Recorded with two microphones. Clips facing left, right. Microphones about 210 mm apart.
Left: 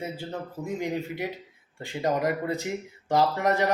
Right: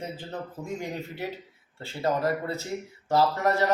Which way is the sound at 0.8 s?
15° left (ahead or behind).